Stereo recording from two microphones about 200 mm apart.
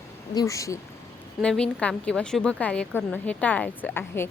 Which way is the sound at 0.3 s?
15° left (ahead or behind).